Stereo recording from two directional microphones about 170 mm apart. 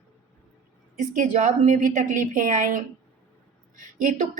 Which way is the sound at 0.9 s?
50° right (ahead or behind).